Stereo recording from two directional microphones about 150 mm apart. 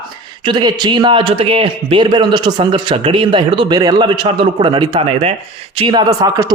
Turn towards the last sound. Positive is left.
turn(degrees=-25)  # may be behind; listen again after turning